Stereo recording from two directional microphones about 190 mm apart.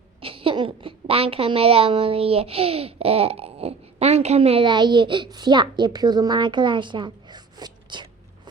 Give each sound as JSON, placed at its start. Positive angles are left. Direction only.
{"t": 0.2, "sound": "a woman's voice", "side_deg": -30}